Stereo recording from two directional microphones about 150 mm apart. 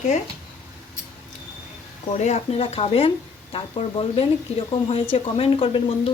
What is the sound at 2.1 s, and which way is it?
Speech, 50° left (ahead or behind).